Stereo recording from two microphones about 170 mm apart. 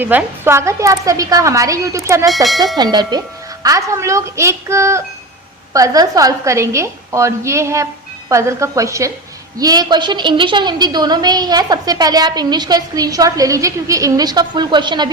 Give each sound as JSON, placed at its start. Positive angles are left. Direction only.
{"t": 0.0, "sound": "a woman's voice", "side_deg": -10}
{"t": 2.3, "sound": "speech", "side_deg": 0}
{"t": 2.7, "sound": "a woman's voice", "side_deg": -25}